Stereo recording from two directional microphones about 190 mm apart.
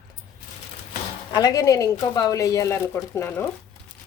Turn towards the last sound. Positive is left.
turn(degrees=15)  # may be behind; listen again after turning